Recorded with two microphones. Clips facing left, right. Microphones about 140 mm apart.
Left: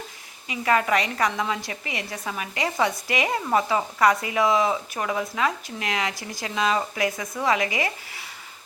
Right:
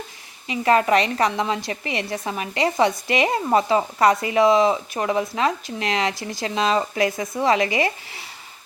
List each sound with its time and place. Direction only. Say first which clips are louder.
0.4 s a woman's voice: right 4 dB; 30° right (ahead or behind)